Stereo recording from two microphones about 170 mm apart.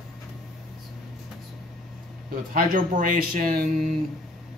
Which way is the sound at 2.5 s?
55° right (ahead or behind).